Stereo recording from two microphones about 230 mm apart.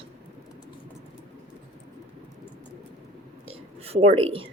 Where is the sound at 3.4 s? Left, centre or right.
Right.